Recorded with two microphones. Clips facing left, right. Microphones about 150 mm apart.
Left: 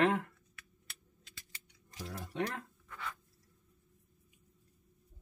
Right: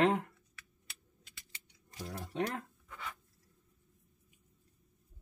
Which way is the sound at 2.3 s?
20° right (ahead or behind).